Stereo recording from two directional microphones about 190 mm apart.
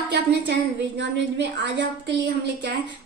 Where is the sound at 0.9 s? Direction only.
65° right (ahead or behind).